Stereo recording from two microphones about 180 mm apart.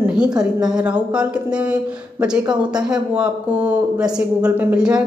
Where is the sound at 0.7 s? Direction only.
5° right (ahead or behind).